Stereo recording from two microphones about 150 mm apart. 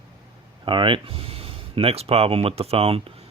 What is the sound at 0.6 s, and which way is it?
Speech, 35° right (ahead or behind).